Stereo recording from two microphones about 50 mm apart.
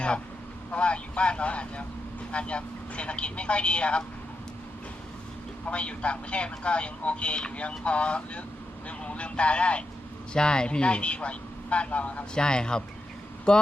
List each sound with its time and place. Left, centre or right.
0.7 s a man's voice: left
5.6 s a man's voice: left
12.3 s speech: centre